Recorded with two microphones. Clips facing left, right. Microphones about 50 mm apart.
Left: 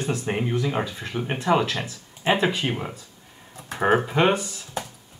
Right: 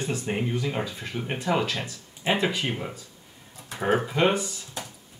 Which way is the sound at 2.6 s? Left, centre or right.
Centre.